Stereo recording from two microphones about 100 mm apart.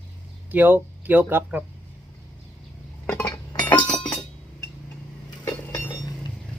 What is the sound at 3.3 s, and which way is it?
Chink, 40° left (ahead or behind).